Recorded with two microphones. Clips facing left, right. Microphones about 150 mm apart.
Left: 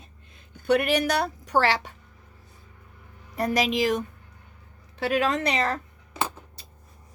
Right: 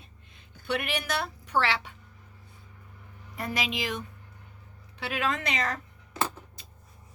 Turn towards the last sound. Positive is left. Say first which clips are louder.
# left 2 dB
turn(degrees=35)  # may be behind; listen again after turning